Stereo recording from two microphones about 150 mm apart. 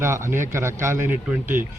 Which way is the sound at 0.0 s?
20° right (ahead or behind).